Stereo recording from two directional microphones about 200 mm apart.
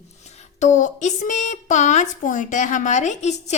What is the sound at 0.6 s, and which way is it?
A woman's voice, 40° left (ahead or behind).